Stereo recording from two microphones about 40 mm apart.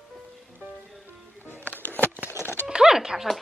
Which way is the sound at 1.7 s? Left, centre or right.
Left.